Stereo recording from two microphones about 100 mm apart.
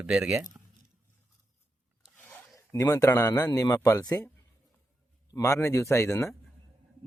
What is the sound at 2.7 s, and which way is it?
Speech, 30° left (ahead or behind).